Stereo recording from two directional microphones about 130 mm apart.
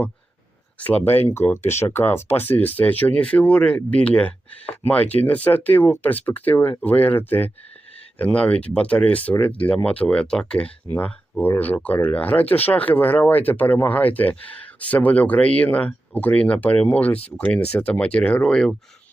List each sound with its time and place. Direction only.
0.8 s speech: 15° left (ahead or behind)